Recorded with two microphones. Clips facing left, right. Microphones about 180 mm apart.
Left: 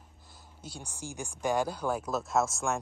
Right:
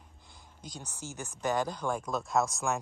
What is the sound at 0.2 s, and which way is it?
Speech, 5° left (ahead or behind).